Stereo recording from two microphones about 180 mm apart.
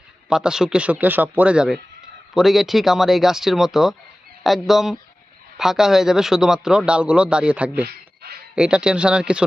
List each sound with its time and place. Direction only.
0.3 s a man's voice: 5° right (ahead or behind)
7.9 s a sound: 60° right (ahead or behind)
8.5 s a man's voice: 5° right (ahead or behind)